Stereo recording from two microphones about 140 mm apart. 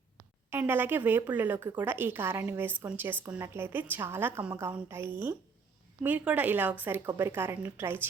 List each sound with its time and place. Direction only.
0.5 s a woman's voice: 15° right (ahead or behind)